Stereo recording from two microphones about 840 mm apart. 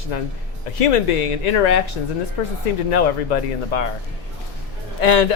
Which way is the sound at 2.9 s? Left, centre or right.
Left.